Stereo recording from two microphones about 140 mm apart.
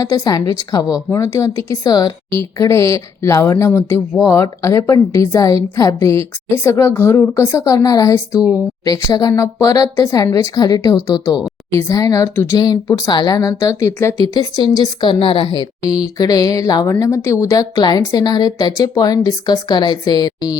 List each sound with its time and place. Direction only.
0.0 s a woman's voice: 25° left (ahead or behind)
11.7 s a woman's voice: 20° left (ahead or behind); by 15.4 s 40° left (ahead or behind)
15.5 s a woman's voice: 25° left (ahead or behind)